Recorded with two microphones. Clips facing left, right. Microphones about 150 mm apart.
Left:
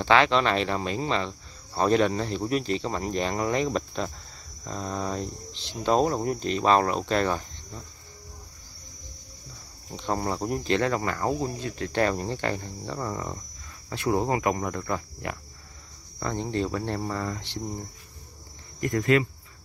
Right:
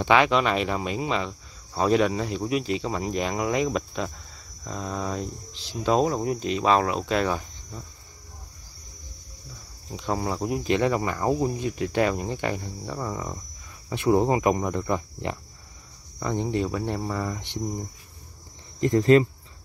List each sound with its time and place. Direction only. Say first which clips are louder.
0.0 s speech: right 1 dB; 10° right (ahead or behind)
9.9 s speech: right 1 dB; 5° right (ahead or behind)
10.8 s speech: right 2 dB; 15° right (ahead or behind)
13.8 s speech: right 4 dB; 20° right (ahead or behind)
18.8 s speech: right 5 dB; 25° right (ahead or behind)